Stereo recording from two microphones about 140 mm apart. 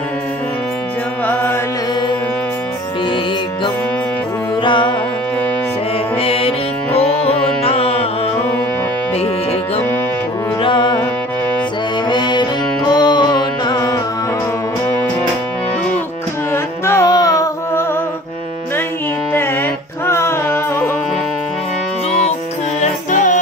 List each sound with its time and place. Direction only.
1.2 s mantra: 10° left (ahead or behind)
4.6 s music: 35° left (ahead or behind)
6.2 s music: 45° left (ahead or behind)
10.6 s music: 35° left (ahead or behind)
12.1 s music: 30° left (ahead or behind)
16.8 s carnatic music: 20° left (ahead or behind)
20.1 s music: 20° left (ahead or behind)
22.8 s music: 60° left (ahead or behind)